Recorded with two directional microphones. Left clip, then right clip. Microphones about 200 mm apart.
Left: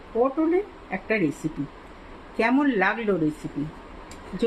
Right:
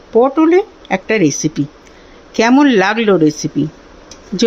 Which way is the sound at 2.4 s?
50° right (ahead or behind).